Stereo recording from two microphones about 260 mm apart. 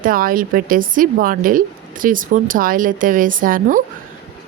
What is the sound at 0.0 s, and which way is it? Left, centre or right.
A woman's voice, right.